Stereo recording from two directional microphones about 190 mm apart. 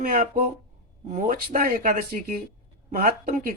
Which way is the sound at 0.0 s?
45° right (ahead or behind).